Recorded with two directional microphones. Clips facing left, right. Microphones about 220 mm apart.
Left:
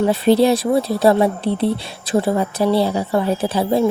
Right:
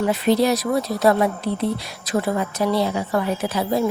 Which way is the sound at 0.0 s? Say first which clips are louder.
Left 4 dB; 30° left (ahead or behind).